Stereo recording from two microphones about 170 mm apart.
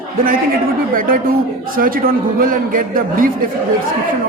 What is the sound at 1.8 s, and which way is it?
A man's voice, 55° right (ahead or behind).